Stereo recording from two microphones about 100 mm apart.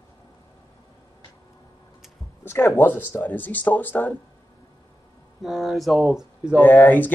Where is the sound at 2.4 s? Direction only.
20° left (ahead or behind).